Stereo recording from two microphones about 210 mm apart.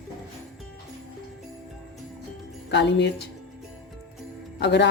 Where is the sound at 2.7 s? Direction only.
55° left (ahead or behind).